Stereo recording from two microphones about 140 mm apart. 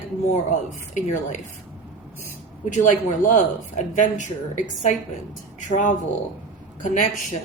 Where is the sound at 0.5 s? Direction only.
60° left (ahead or behind).